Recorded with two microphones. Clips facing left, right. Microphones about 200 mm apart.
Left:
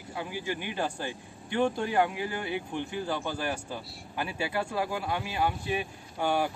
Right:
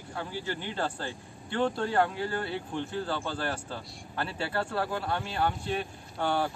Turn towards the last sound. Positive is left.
turn(degrees=10)  # may be behind; listen again after turning